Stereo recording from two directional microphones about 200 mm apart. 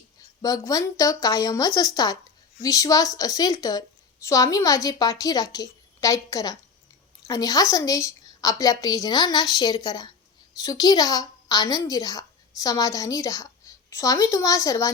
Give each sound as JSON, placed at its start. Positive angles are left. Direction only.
{"t": 0.4, "sound": "a woman's voice", "side_deg": 20}